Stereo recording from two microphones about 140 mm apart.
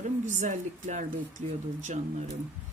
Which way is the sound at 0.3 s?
60° right (ahead or behind).